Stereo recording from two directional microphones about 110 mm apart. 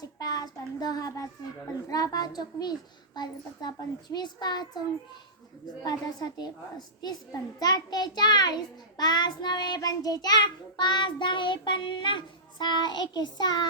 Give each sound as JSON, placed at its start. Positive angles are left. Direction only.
{"t": 0.0, "sound": "a child's voice", "side_deg": 35}
{"t": 5.8, "sound": "a child's voice", "side_deg": 35}
{"t": 9.0, "sound": "child singing", "side_deg": 40}